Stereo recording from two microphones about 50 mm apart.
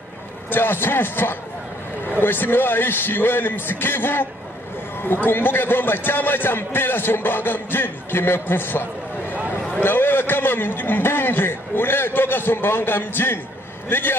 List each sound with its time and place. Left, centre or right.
0.5 s a man's voice: left